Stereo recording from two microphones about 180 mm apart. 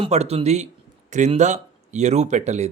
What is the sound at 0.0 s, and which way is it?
Speech, 35° right (ahead or behind).